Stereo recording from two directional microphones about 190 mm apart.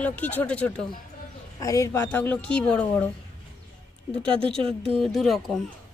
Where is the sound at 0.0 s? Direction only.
10° left (ahead or behind).